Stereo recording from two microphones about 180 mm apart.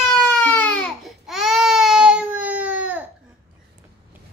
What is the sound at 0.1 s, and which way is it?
Baby cry, 5° left (ahead or behind).